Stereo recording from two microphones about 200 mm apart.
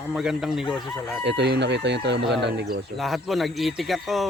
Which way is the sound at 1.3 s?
60° right (ahead or behind).